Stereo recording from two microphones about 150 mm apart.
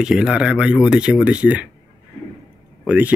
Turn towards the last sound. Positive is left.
turn(degrees=-10)  # may be behind; listen again after turning